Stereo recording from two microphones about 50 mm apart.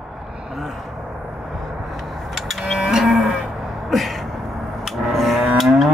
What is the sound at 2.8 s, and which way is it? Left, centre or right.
Livestock, centre.